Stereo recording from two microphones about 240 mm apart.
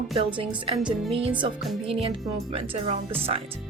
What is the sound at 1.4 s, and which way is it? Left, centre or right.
Speech, right.